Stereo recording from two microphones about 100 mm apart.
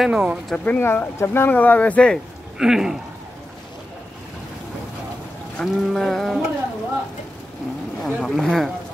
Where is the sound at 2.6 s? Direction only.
5° right (ahead or behind).